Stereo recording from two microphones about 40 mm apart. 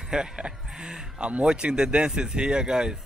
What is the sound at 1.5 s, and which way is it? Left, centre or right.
Speech, right.